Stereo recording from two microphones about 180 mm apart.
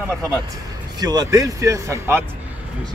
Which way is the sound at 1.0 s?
20° right (ahead or behind).